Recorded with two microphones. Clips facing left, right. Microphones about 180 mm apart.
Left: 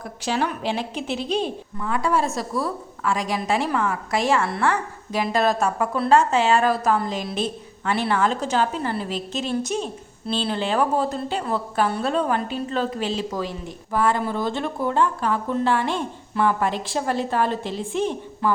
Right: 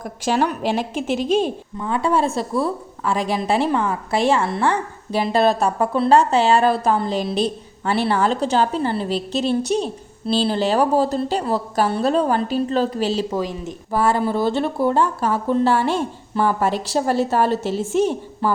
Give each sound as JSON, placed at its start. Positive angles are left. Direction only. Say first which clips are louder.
{"t": 0.0, "sound": "a woman's voice", "louder": "right 4 dB", "side_deg": -45}
{"t": 1.8, "sound": "a woman's voice", "louder": "right 3 dB", "side_deg": -30}
{"t": 13.3, "sound": "speech", "louder": "right 4 dB", "side_deg": -20}
{"t": 13.9, "sound": "a woman's voice", "louder": "right 3 dB", "side_deg": -35}